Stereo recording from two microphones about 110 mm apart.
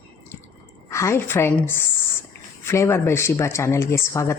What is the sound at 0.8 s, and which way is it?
Speech, 25° left (ahead or behind).